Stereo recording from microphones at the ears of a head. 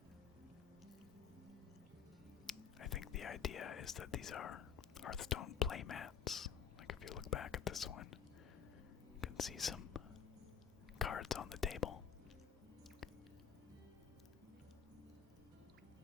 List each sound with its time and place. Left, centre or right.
2.5 s speech: left
9.2 s whispering: left
10.9 s speech: left